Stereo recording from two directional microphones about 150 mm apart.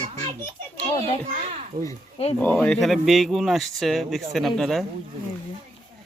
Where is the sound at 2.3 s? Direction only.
10° left (ahead or behind).